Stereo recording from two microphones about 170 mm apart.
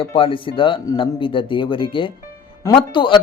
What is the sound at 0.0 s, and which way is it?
Speech, 35° left (ahead or behind).